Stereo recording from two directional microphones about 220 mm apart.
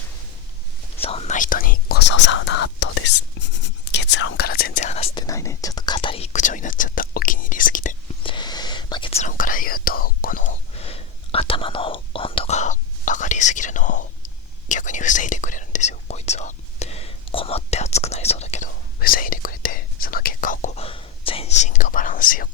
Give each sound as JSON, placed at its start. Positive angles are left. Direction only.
{"t": 1.0, "sound": "whispering", "side_deg": 25}
{"t": 5.2, "sound": "whispering", "side_deg": 15}
{"t": 8.2, "sound": "whispering", "side_deg": 20}
{"t": 18.9, "sound": "whispering", "side_deg": 40}